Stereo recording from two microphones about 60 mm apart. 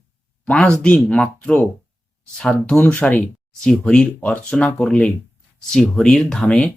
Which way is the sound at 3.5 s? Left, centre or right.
Centre.